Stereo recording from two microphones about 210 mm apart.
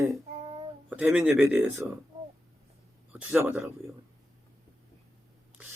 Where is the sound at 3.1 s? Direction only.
10° right (ahead or behind).